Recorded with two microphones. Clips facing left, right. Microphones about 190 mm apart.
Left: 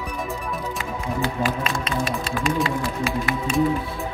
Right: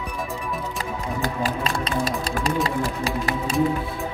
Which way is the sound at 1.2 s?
35° right (ahead or behind).